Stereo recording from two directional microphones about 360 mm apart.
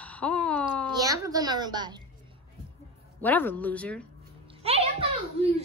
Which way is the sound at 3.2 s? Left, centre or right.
Centre.